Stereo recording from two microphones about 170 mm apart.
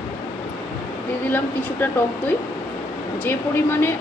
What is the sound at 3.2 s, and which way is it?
Speech, 15° left (ahead or behind).